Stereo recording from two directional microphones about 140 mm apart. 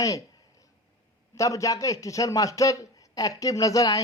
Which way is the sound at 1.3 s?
25° left (ahead or behind).